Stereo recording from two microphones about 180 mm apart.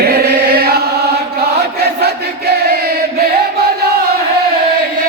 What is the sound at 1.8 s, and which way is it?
Crowd, 60° right (ahead or behind).